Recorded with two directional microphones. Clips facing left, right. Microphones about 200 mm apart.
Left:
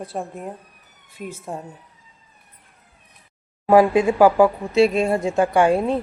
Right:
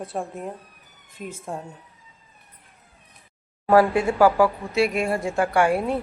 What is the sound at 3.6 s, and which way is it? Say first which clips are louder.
Speech: left 3 dB; 15° left (ahead or behind).